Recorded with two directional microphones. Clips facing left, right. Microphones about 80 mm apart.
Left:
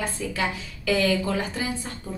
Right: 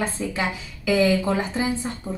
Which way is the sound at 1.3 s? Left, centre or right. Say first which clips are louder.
Right 4 dB; right.